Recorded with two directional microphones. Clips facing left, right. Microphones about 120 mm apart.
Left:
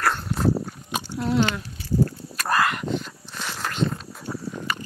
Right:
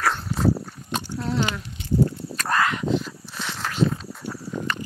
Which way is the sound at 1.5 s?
20° right (ahead or behind).